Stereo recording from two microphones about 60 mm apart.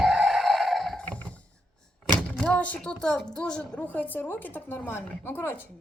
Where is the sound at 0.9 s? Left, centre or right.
Centre.